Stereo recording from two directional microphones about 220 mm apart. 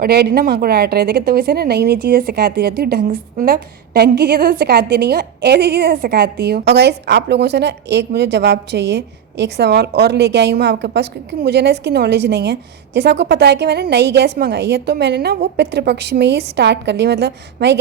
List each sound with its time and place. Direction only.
0.0 s speech: 45° right (ahead or behind)